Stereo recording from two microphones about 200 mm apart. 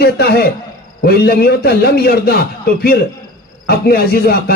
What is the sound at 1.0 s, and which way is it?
Music, 50° left (ahead or behind).